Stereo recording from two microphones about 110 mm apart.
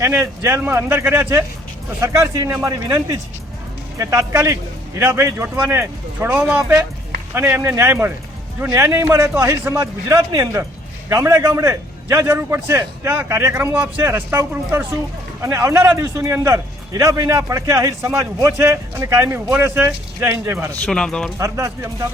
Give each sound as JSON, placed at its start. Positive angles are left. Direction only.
{"t": 0.1, "sound": "a man's voice", "side_deg": -20}
{"t": 20.8, "sound": "speech", "side_deg": 5}
{"t": 21.3, "sound": "a man's voice", "side_deg": -30}